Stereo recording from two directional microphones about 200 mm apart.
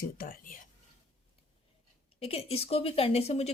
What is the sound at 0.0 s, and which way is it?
Speech, 45° left (ahead or behind).